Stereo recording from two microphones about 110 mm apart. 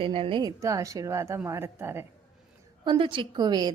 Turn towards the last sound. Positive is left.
turn(degrees=-40)  # may be behind; listen again after turning